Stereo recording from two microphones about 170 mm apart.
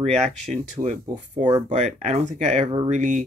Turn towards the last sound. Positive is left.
turn(degrees=-45)  # may be behind; listen again after turning